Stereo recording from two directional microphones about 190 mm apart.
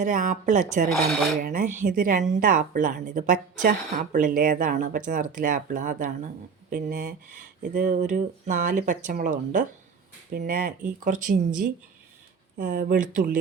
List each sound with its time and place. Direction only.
0.0 s a woman's voice: 40° right (ahead or behind)